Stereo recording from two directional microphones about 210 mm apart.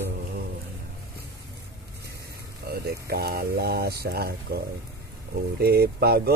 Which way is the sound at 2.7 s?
50° right (ahead or behind).